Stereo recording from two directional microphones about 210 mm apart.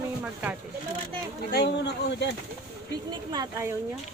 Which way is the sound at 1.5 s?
55° left (ahead or behind).